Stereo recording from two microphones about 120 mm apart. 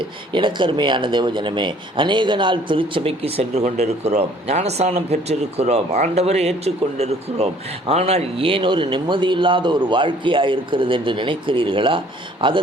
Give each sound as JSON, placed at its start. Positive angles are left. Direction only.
{"t": 0.0, "sound": "speech", "side_deg": -40}